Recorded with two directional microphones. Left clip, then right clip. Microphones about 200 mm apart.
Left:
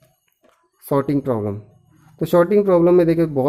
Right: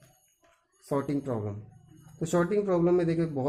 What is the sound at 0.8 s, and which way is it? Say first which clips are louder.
Speech: left 11 dB; 45° left (ahead or behind).